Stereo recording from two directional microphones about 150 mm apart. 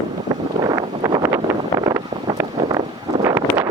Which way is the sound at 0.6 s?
25° right (ahead or behind).